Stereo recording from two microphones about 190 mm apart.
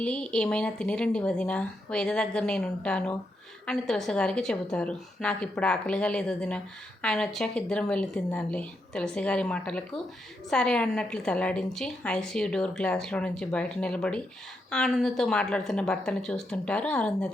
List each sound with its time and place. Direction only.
0.0 s a woman's voice: 5° left (ahead or behind)